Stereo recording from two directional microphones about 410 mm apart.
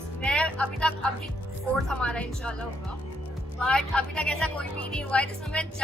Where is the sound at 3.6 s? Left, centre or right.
Centre.